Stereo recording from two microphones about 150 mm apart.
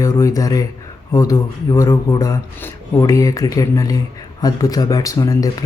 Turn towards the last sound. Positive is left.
turn(degrees=25)  # may be behind; listen again after turning